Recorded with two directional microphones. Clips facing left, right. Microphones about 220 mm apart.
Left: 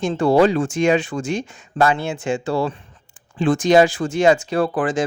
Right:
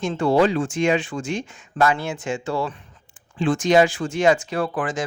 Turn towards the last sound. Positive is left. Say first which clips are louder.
# left 5 dB
turn(degrees=30)  # may be behind; listen again after turning